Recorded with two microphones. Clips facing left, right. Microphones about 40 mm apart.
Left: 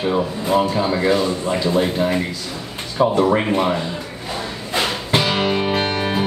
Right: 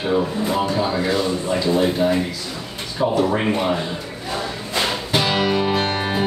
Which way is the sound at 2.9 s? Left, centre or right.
Left.